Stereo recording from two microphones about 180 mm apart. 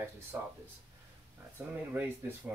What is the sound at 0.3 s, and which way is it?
Speech, 10° right (ahead or behind).